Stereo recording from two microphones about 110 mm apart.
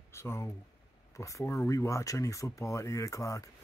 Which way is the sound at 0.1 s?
25° left (ahead or behind).